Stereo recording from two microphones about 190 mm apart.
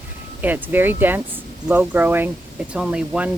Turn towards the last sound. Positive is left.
turn(degrees=-5)  # may be behind; listen again after turning